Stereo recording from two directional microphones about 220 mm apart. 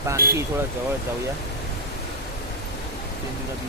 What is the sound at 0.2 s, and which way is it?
Speech, 40° right (ahead or behind).